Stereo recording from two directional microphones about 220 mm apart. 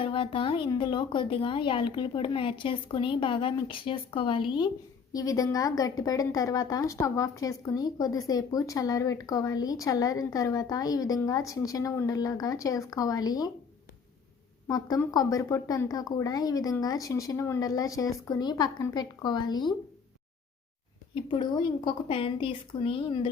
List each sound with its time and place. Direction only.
0.0 s a woman's voice: 25° left (ahead or behind)
14.7 s a woman's voice: 15° left (ahead or behind)
21.2 s a woman's voice: 20° left (ahead or behind)